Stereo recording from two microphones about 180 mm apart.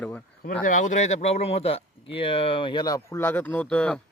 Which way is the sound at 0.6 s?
45° left (ahead or behind).